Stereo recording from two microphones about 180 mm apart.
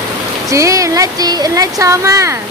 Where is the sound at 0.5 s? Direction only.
15° right (ahead or behind).